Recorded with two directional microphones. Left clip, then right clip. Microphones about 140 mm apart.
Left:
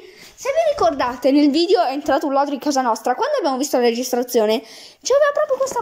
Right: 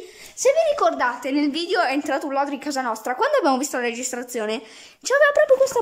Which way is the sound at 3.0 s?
Centre (ahead or behind).